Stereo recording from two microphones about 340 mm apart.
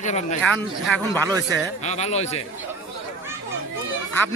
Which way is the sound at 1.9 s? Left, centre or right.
Centre.